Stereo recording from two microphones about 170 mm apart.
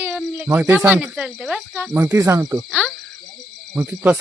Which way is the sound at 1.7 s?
15° right (ahead or behind).